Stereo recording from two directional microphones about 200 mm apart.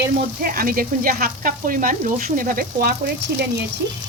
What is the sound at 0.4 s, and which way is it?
A woman's voice, 45° right (ahead or behind).